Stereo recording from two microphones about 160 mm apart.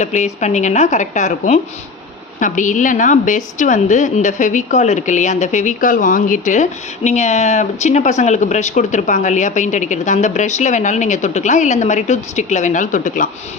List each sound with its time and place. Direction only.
0.0 s a woman's voice: 45° left (ahead or behind)